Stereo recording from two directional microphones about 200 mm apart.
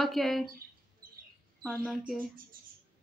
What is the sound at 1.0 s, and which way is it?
Bird, 45° right (ahead or behind).